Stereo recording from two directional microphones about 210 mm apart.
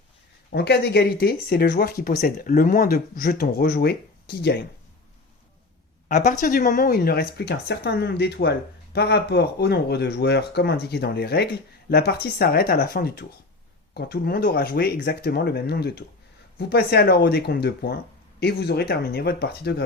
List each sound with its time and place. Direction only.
0.5 s speech: 50° left (ahead or behind)
6.1 s speech: 40° left (ahead or behind)